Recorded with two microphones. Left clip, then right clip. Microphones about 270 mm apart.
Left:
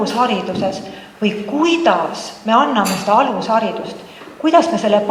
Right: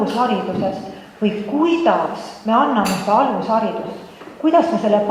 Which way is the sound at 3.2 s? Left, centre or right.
Right.